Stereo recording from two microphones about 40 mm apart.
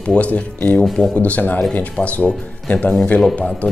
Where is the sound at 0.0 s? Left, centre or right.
Left.